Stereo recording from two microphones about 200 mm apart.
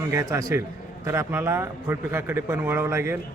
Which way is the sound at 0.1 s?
15° right (ahead or behind).